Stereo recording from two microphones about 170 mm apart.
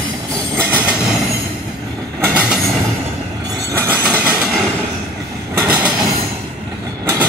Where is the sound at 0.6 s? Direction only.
10° right (ahead or behind).